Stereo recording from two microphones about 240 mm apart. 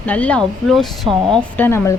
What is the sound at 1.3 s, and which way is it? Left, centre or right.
Speech, centre.